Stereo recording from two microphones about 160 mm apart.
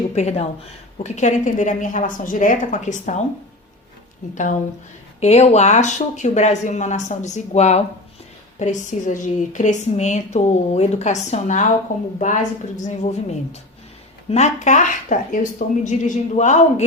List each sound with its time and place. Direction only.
0.1 s a woman's voice: 40° left (ahead or behind)
5.2 s a woman's voice: 45° left (ahead or behind)